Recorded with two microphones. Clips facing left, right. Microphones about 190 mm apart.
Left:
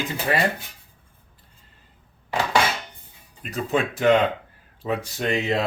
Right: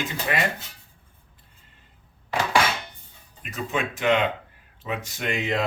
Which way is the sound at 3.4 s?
35° left (ahead or behind).